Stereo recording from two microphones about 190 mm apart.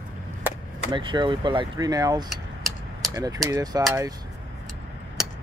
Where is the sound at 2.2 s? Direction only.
Centre (ahead or behind).